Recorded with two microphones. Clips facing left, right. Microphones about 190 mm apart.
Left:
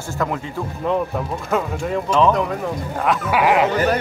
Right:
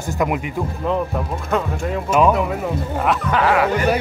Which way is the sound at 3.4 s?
20° left (ahead or behind).